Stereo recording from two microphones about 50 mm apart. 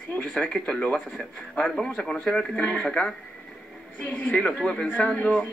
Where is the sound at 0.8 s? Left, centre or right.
Left.